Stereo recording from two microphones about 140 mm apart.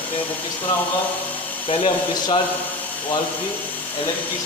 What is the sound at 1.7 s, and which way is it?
Speech, 40° left (ahead or behind).